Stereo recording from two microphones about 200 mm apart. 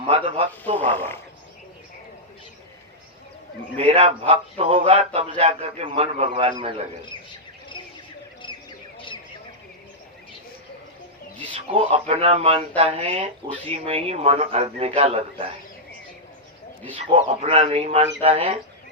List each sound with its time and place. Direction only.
0.1 s a man's voice: 30° right (ahead or behind)
0.9 s speech: 10° left (ahead or behind)
3.8 s speech: 30° right (ahead or behind)
8.4 s bird: 25° left (ahead or behind)
11.5 s speech: 30° right (ahead or behind)
17.2 s speech: 30° right (ahead or behind)